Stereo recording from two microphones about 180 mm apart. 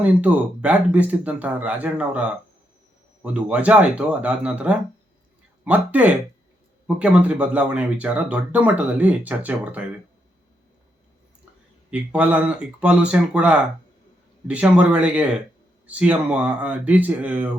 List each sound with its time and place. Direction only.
0.0 s speech: 5° right (ahead or behind)
3.3 s speech: 5° right (ahead or behind)
11.9 s speech: 5° right (ahead or behind)